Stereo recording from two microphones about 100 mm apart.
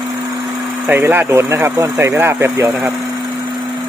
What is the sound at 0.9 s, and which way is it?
Speech, 20° right (ahead or behind).